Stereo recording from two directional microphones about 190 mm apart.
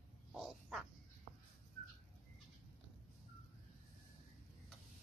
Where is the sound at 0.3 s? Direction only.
Centre (ahead or behind).